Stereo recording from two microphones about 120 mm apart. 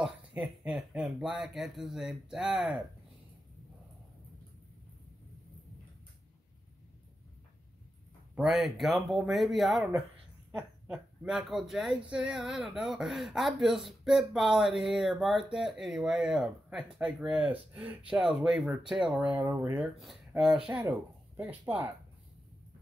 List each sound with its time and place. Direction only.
0.0 s speech: 10° right (ahead or behind)
8.4 s speech: centre (ahead or behind)
19.3 s speech: 20° right (ahead or behind)
19.8 s speech: centre (ahead or behind)